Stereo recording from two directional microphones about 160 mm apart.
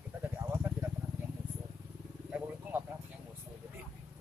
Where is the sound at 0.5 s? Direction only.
15° right (ahead or behind).